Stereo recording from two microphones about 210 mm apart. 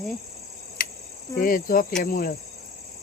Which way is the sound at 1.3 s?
40° left (ahead or behind).